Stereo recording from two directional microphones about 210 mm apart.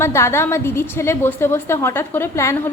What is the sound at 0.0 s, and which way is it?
A woman's voice, 10° left (ahead or behind).